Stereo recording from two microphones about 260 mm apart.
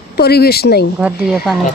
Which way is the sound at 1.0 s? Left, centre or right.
Centre.